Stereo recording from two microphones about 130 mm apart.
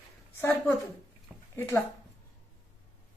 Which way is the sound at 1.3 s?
10° right (ahead or behind).